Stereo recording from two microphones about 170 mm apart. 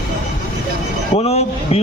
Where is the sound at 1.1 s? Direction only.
35° left (ahead or behind).